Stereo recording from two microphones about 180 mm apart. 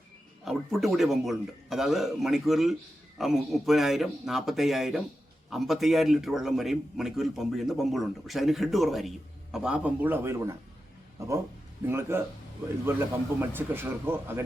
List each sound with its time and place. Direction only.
0.4 s a man's voice: centre (ahead or behind)
13.4 s speech: 10° right (ahead or behind)